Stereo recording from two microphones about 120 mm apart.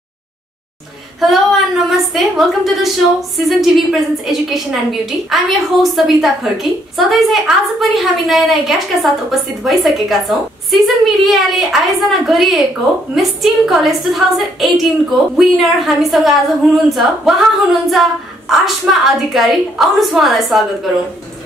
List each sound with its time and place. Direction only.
1.2 s a woman's voice: centre (ahead or behind)
18.5 s a woman's voice: centre (ahead or behind)